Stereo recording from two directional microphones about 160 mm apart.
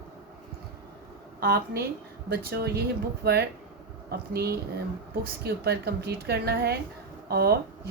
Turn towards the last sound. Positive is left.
turn(degrees=-80)